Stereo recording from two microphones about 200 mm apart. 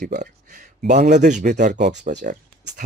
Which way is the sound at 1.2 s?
35° right (ahead or behind).